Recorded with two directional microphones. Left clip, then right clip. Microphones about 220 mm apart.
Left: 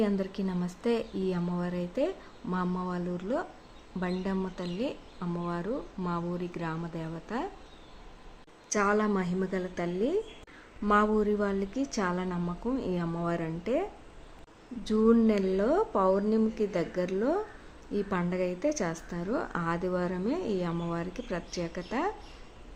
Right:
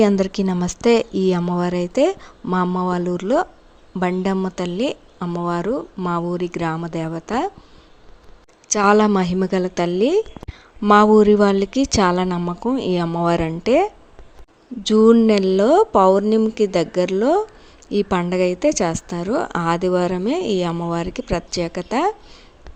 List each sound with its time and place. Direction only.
0.0 s speech: 40° right (ahead or behind)
8.7 s speech: 40° right (ahead or behind)
14.8 s speech: 35° right (ahead or behind)